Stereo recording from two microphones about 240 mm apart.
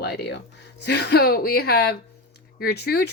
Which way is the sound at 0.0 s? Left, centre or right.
Left.